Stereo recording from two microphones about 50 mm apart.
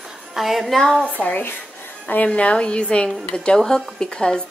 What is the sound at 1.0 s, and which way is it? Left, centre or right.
A woman's voice, left.